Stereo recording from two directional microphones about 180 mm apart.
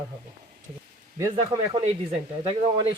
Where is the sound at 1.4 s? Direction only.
35° right (ahead or behind).